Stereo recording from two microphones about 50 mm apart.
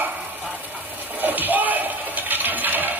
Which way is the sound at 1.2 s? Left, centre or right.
Right.